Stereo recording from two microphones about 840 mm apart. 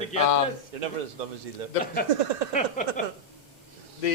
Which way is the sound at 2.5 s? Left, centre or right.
Centre.